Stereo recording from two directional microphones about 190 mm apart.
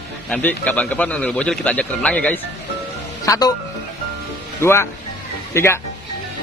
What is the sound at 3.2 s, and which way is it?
Speech, 20° left (ahead or behind).